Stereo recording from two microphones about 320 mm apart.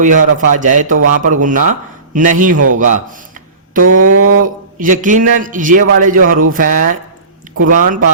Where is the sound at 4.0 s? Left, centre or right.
Right.